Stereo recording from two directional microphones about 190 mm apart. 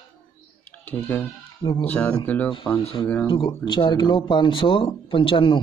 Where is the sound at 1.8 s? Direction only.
5° left (ahead or behind).